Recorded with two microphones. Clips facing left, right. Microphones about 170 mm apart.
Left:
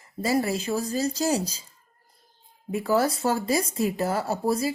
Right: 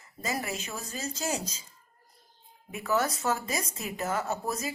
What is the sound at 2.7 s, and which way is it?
A woman's voice, 30° left (ahead or behind).